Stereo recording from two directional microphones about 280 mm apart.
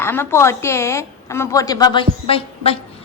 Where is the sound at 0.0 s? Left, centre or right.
Centre.